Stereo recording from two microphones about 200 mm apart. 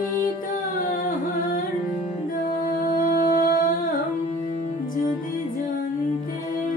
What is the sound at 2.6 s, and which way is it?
Music, 45° left (ahead or behind).